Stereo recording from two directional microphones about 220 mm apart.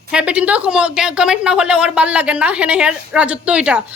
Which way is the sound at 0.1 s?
5° right (ahead or behind).